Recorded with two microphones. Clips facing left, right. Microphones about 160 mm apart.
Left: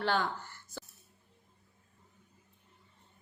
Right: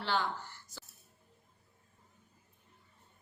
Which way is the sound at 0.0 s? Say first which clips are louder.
Left 3 dB; 50° left (ahead or behind).